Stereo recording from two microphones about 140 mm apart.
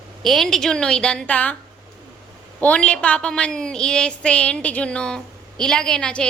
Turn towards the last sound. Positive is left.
turn(degrees=5)  # may be behind; listen again after turning